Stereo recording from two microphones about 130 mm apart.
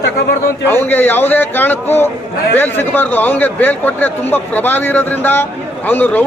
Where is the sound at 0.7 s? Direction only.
15° left (ahead or behind).